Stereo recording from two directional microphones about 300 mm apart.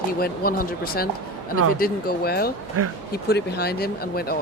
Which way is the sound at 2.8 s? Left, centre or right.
Right.